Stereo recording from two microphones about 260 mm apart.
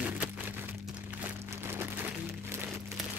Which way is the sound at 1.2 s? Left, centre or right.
Centre.